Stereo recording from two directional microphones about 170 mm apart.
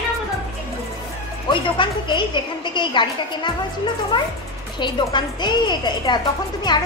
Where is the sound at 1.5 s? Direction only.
30° left (ahead or behind).